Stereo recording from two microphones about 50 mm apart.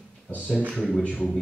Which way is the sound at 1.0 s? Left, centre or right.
Left.